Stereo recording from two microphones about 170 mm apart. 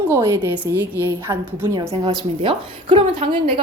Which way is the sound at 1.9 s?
30° right (ahead or behind).